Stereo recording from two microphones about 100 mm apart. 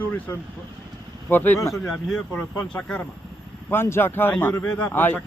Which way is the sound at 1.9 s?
10° left (ahead or behind).